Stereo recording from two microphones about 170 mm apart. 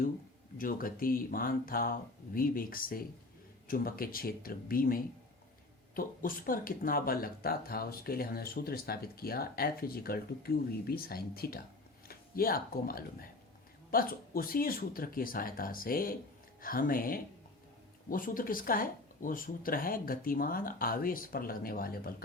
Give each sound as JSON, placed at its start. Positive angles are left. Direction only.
{"t": 0.6, "sound": "speech", "side_deg": 55}